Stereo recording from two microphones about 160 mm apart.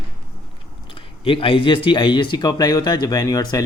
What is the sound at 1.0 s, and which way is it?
Speech, 35° left (ahead or behind).